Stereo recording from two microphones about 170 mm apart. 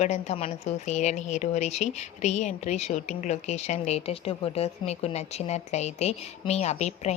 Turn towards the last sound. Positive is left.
turn(degrees=40)  # may be behind; listen again after turning